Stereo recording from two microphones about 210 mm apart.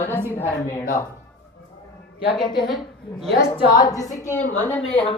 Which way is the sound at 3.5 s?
15° left (ahead or behind).